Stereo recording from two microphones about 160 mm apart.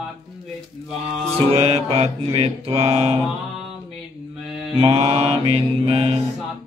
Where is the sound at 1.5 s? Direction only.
40° right (ahead or behind).